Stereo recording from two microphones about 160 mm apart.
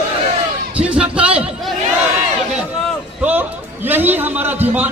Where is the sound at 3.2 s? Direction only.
10° right (ahead or behind).